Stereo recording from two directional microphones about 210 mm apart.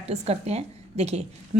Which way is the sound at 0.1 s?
30° right (ahead or behind).